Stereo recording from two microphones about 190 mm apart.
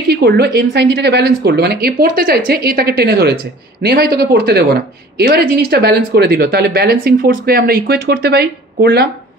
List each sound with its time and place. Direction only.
0.2 s speech: 55° right (ahead or behind)